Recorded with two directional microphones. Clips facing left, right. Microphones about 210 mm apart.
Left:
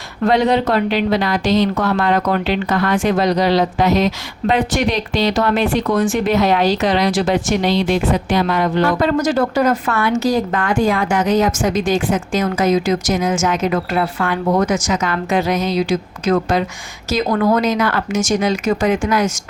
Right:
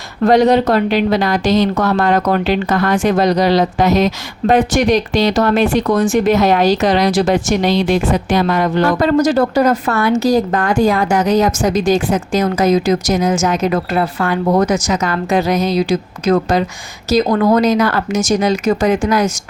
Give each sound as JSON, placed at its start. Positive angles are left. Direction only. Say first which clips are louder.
{"t": 0.3, "sound": "a woman's voice", "louder": "right 4 dB", "side_deg": -45}